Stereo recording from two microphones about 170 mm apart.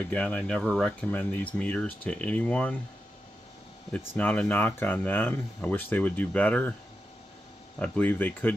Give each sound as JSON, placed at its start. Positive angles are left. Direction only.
{"t": 0.1, "sound": "speech", "side_deg": 10}
{"t": 3.9, "sound": "speech", "side_deg": 10}
{"t": 7.8, "sound": "speech", "side_deg": 10}